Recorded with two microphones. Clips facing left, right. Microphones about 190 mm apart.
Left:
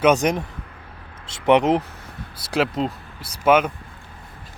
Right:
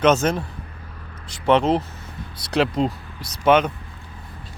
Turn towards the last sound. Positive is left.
turn(degrees=5)  # may be behind; listen again after turning